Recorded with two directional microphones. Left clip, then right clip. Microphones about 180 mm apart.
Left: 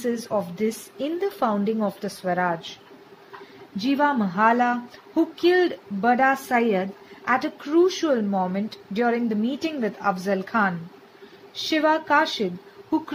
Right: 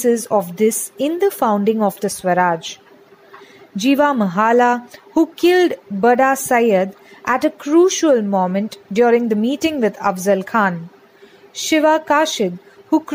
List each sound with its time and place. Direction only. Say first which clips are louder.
0.0 s a woman's voice: right 10 dB; 45° right (ahead or behind)
3.7 s speech: right 7 dB; 40° right (ahead or behind)
11.7 s speech: right 6 dB; 40° right (ahead or behind)